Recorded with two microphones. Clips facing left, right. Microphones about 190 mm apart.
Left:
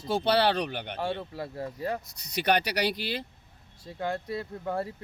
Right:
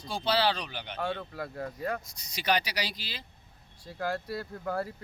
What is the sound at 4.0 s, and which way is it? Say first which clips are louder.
Speech: left 1 dB; 20° left (ahead or behind).